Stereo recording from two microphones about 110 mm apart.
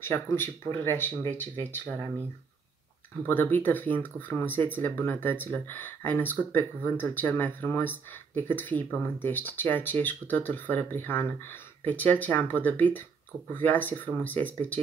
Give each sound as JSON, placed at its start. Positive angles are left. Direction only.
{"t": 0.0, "sound": "speech", "side_deg": 25}
{"t": 3.3, "sound": "speech", "side_deg": 15}